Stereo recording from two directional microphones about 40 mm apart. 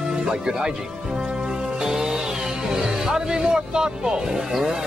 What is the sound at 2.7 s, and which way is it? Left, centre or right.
Speech, centre.